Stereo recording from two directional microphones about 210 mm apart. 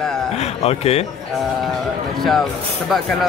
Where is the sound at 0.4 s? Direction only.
30° left (ahead or behind).